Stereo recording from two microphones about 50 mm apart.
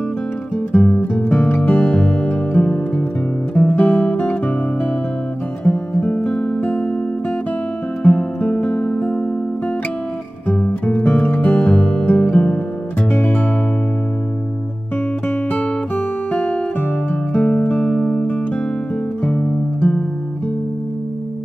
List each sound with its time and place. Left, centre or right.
0.7 s music: left
3.5 s guitar: left
4.1 s music: left
5.6 s music: left
8.0 s music: left
10.5 s music: left
13.1 s music: left
17.1 s guitar: centre
17.8 s music: centre
19.2 s music: left